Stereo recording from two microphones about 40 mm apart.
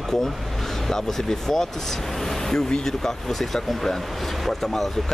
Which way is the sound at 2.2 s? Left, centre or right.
Centre.